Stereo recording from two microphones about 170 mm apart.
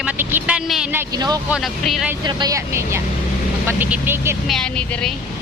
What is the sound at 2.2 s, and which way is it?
Speech, 20° right (ahead or behind).